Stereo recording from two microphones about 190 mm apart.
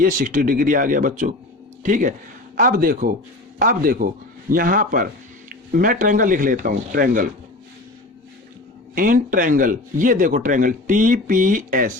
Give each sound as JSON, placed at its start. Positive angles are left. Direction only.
{"t": 0.0, "sound": "a man's voice", "side_deg": -45}
{"t": 9.0, "sound": "a man's voice", "side_deg": -45}